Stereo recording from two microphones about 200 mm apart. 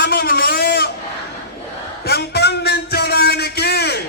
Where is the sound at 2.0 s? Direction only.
55° left (ahead or behind).